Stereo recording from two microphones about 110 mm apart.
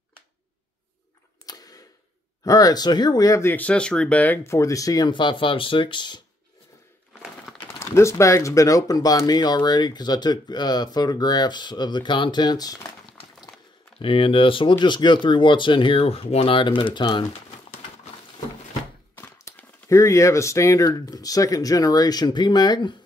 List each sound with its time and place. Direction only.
1.4 s a sound: 35° left (ahead or behind)
2.4 s speech: 35° left (ahead or behind)
3.5 s speech: 10° left (ahead or behind)
4.6 s speech: 30° left (ahead or behind)
7.8 s speech: 25° left (ahead or behind)
13.9 s speech: 55° left (ahead or behind)
19.1 s a sound: 25° left (ahead or behind)
19.9 s speech: 25° left (ahead or behind)